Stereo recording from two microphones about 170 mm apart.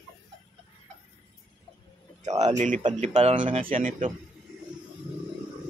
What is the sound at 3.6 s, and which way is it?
Speech, 50° right (ahead or behind).